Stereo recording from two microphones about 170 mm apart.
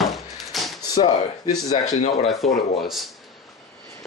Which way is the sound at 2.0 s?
35° left (ahead or behind).